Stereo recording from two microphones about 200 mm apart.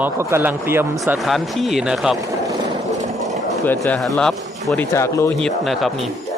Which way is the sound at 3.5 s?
5° left (ahead or behind).